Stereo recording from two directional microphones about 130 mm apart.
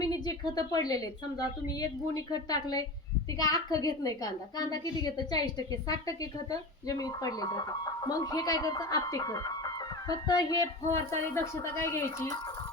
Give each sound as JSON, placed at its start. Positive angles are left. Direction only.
{"t": 0.0, "sound": "a woman's voice", "side_deg": 30}
{"t": 10.9, "sound": "a woman's voice", "side_deg": 20}